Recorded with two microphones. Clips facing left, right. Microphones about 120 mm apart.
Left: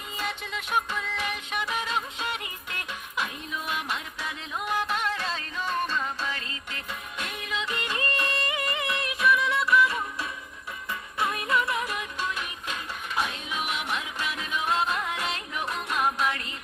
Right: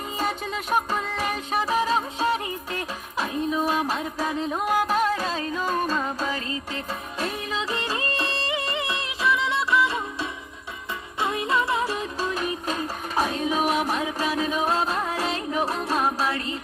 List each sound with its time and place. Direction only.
0.2 s music: 40° right (ahead or behind)
11.2 s music: 25° right (ahead or behind)